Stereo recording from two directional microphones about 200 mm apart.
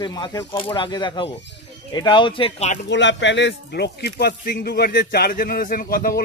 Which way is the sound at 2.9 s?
65° left (ahead or behind).